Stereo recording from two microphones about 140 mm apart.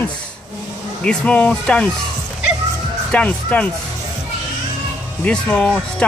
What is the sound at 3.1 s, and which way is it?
Speech, 10° left (ahead or behind).